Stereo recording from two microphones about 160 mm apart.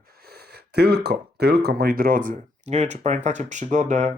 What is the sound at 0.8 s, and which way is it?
Speech, 90° right.